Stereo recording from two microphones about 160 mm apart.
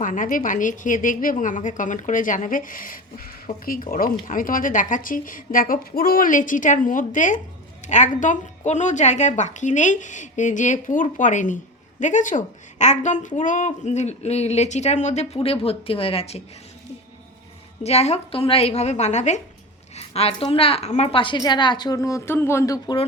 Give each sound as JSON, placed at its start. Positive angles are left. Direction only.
{"t": 0.0, "sound": "a woman's voice", "side_deg": 55}
{"t": 17.8, "sound": "a woman's voice", "side_deg": 40}